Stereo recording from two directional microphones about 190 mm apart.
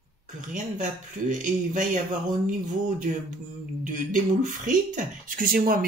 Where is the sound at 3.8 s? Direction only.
40° right (ahead or behind).